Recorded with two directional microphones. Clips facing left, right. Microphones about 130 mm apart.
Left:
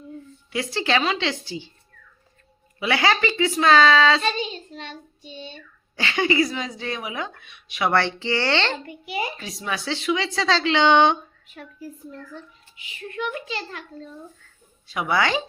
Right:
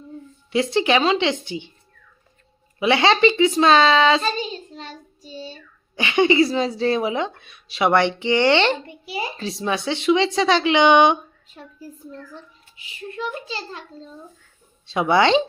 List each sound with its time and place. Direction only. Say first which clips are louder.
0.5 s speech: right 5 dB; 20° right (ahead or behind)
2.7 s speech: right 4 dB; 25° right (ahead or behind)
4.2 s child singing: right 1 dB; 40° right (ahead or behind)
6.0 s speech: right 5 dB; 20° right (ahead or behind)
8.9 s speech: even; 30° right (ahead or behind); by 11.2 s 15° right (ahead or behind)
12.7 s a child's voice: even; 30° right (ahead or behind)
14.8 s speech: right 6 dB; 25° right (ahead or behind)